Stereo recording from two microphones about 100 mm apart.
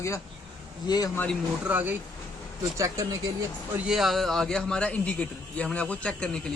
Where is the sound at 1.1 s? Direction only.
15° left (ahead or behind).